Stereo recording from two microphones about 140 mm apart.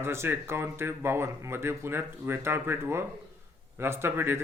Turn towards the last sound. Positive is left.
turn(degrees=-15)  # may be behind; listen again after turning